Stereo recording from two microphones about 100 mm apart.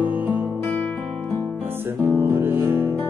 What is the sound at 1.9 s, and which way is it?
Music, 20° right (ahead or behind).